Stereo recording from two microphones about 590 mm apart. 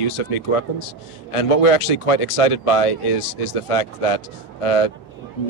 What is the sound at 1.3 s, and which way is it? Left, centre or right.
Speech, left.